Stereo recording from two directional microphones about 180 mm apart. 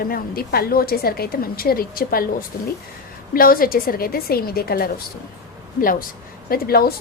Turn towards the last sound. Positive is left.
turn(degrees=60)  # may be behind; listen again after turning